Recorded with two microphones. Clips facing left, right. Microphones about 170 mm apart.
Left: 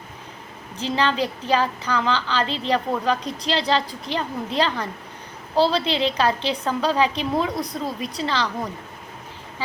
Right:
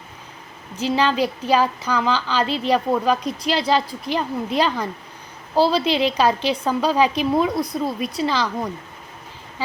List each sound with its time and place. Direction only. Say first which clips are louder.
0.8 s a woman's voice: right 3 dB; 10° right (ahead or behind)